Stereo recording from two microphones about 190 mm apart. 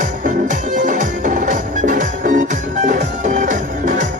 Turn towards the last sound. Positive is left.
turn(degrees=-40)  # may be behind; listen again after turning